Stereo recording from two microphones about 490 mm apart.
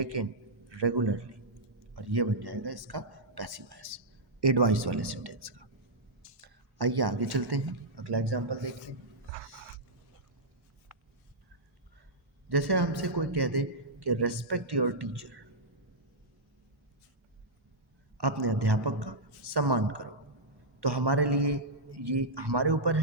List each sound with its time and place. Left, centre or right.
0.0 s a man's voice: right
12.5 s a man's voice: right
18.2 s a man's voice: right